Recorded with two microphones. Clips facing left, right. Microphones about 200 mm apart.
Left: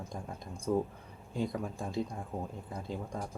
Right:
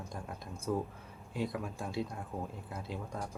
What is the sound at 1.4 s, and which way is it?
Speech, 5° right (ahead or behind).